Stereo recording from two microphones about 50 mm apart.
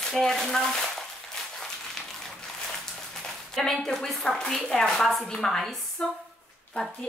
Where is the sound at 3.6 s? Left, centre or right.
Centre.